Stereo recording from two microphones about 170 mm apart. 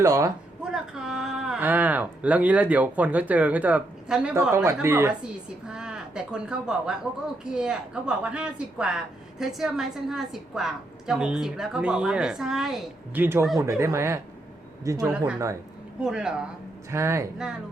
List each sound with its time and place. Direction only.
0.0 s speech: 20° right (ahead or behind)
0.6 s speech: 5° right (ahead or behind)
4.5 s speech: 15° right (ahead or behind)
5.6 s a woman's voice: 5° right (ahead or behind); by 15.1 s 20° right (ahead or behind)
16.0 s a woman's voice: 5° right (ahead or behind)
16.9 s speech: 15° right (ahead or behind)